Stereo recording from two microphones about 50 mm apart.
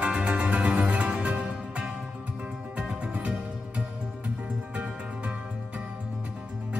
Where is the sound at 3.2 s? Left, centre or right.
Right.